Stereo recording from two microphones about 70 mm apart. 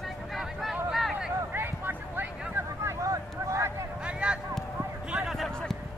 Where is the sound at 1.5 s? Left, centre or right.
Right.